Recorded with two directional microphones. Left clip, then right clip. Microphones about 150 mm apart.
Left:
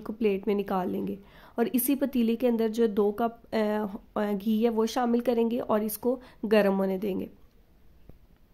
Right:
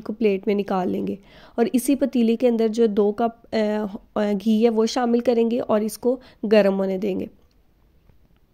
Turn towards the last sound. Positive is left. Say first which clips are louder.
# right 5 dB
turn(degrees=-30)  # may be behind; listen again after turning